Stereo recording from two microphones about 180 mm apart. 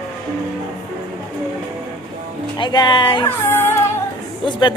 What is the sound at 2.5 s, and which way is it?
Speech, 25° left (ahead or behind).